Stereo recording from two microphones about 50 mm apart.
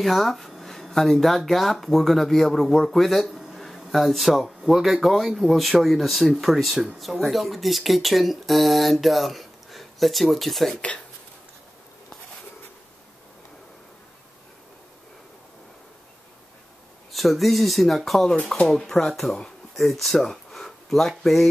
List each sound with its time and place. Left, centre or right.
0.0 s speech: centre
10.7 s speech: left
17.1 s speech: centre
19.7 s a sound: centre